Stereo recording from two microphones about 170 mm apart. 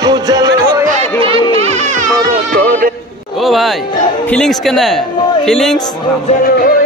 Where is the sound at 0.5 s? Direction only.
20° right (ahead or behind).